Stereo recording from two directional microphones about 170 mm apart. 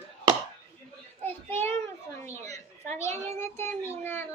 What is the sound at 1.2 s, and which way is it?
Child singing, 15° left (ahead or behind).